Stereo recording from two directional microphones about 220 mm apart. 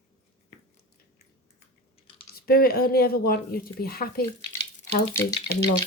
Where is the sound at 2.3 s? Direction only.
45° left (ahead or behind).